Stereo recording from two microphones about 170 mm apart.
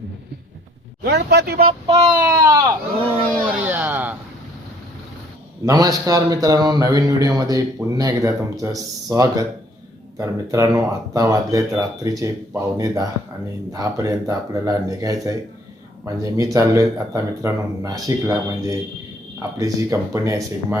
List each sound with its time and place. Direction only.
1.0 s speech: 80° right
1.9 s child singing: 35° right (ahead or behind)
2.3 s speech: 20° right (ahead or behind)
5.6 s speech: 20° right (ahead or behind)